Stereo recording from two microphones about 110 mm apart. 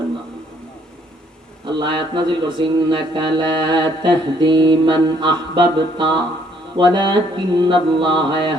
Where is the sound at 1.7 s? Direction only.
45° right (ahead or behind).